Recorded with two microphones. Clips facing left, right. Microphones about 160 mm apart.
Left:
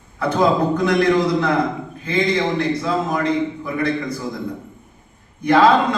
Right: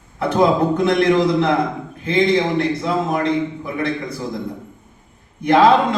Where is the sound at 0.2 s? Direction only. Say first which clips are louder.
Right 1 dB; 25° right (ahead or behind).